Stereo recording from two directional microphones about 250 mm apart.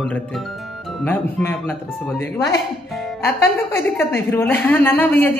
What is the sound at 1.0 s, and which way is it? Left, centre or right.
Speech, centre.